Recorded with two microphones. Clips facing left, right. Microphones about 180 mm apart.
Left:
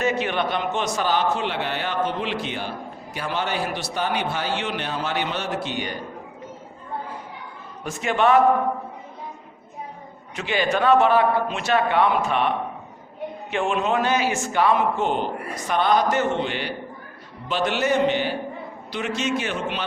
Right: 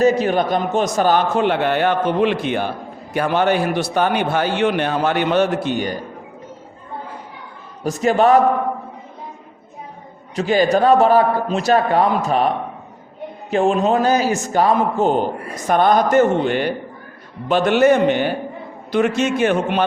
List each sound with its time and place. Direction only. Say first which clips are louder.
0.0 s a man's voice: right 8 dB; 40° right (ahead or behind)
7.9 s a man's voice: right 6 dB; 40° right (ahead or behind)
10.3 s a man's voice: right 8 dB; 40° right (ahead or behind)